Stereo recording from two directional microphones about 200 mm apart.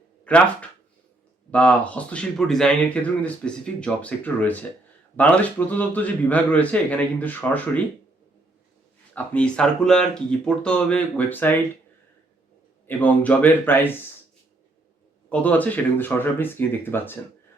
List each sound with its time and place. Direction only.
0.3 s speech: 5° left (ahead or behind)
9.1 s speech: 5° left (ahead or behind)
12.9 s speech: 10° left (ahead or behind)
15.3 s speech: 5° left (ahead or behind)